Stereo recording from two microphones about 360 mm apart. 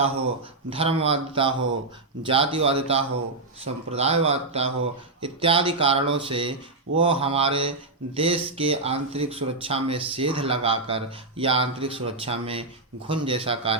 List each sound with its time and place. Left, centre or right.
0.7 s speech: centre